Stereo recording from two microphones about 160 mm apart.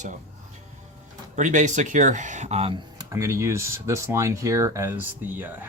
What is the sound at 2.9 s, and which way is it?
Speech, 20° right (ahead or behind).